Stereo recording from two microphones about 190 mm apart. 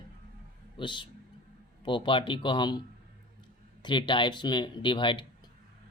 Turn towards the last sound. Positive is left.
turn(degrees=25)  # may be behind; listen again after turning